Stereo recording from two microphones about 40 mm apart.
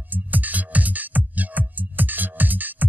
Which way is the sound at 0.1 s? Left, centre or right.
Right.